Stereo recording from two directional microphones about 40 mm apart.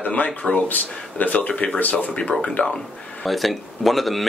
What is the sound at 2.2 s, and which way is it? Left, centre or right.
Speech, left.